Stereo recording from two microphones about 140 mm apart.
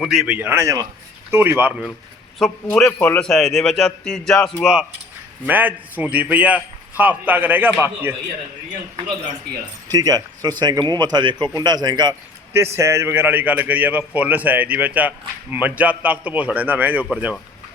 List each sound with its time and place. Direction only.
0.0 s a man's voice: centre (ahead or behind)
0.3 s a man's voice: 15° right (ahead or behind)
2.6 s a man's voice: 10° left (ahead or behind); by 8.1 s 15° right (ahead or behind)
9.9 s speech: 25° right (ahead or behind)
12.7 s a man's voice: 20° right (ahead or behind)